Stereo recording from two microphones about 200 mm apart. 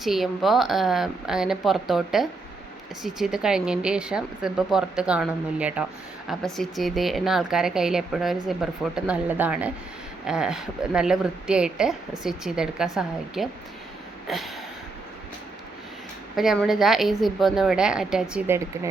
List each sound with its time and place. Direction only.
0.0 s speech: centre (ahead or behind)
16.3 s speech: centre (ahead or behind)